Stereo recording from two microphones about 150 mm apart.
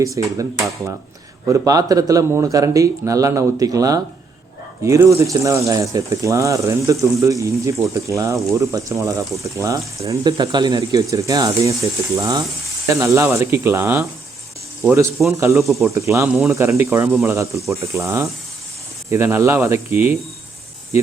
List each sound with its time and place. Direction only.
0.0 s speech: 20° right (ahead or behind)
15.6 s speech: centre (ahead or behind)
16.0 s speech: 20° right (ahead or behind)